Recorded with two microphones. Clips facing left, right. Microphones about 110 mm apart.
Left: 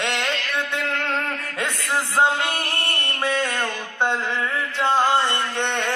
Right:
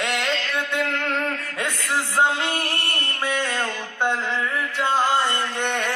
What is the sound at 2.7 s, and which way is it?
Mantra, 25° left (ahead or behind).